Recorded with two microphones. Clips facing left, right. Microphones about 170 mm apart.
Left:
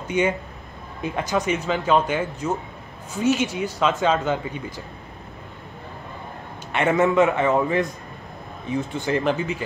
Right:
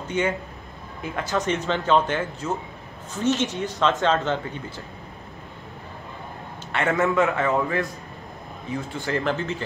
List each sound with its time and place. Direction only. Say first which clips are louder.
0.1 s speech: left 3 dB; 15° left (ahead or behind)
6.7 s a man's voice: left 3 dB; 20° left (ahead or behind)